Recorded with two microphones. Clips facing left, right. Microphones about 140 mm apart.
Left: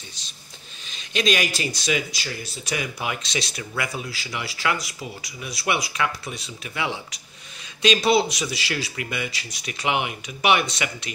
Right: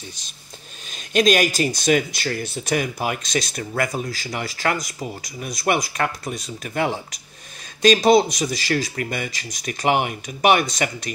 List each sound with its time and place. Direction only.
0.9 s speech: 50° right (ahead or behind)